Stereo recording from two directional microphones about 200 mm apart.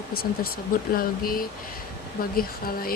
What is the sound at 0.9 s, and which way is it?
Speech, 45° left (ahead or behind).